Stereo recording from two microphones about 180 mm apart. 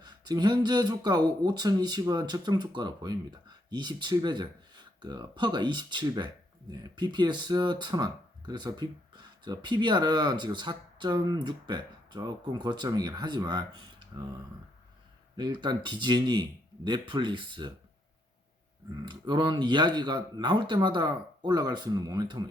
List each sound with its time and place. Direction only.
0.0 s speech: 25° right (ahead or behind)
15.4 s speech: 25° right (ahead or behind)
18.9 s speech: 25° right (ahead or behind)